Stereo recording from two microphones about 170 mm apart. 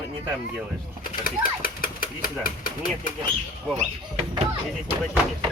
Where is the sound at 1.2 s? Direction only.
55° left (ahead or behind).